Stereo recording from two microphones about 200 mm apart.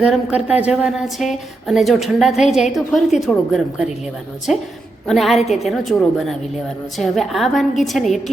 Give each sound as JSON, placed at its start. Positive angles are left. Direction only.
{"t": 0.0, "sound": "a woman's voice", "side_deg": -5}